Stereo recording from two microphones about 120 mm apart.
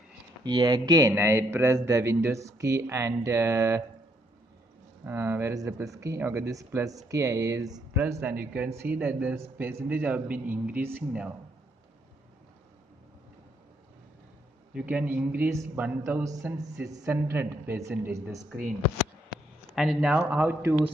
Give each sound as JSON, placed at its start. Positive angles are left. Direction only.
{"t": 0.4, "sound": "a man's voice", "side_deg": -35}
{"t": 5.0, "sound": "speech", "side_deg": -20}
{"t": 8.1, "sound": "speech", "side_deg": -15}
{"t": 14.7, "sound": "speech", "side_deg": -10}
{"t": 15.5, "sound": "speech", "side_deg": -25}
{"t": 16.4, "sound": "speech", "side_deg": -5}
{"t": 17.1, "sound": "speech", "side_deg": -20}
{"t": 19.7, "sound": "speech", "side_deg": 0}